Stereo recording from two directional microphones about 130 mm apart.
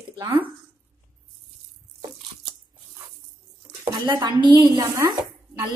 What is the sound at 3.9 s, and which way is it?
Speech, 35° right (ahead or behind).